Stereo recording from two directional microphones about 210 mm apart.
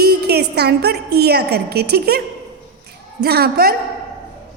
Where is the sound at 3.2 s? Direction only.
45° right (ahead or behind).